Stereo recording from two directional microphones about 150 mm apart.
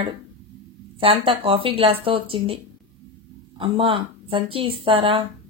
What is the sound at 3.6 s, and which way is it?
Speech, 35° right (ahead or behind).